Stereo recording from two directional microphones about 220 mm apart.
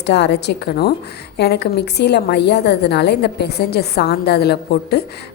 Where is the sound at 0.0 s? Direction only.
50° left (ahead or behind).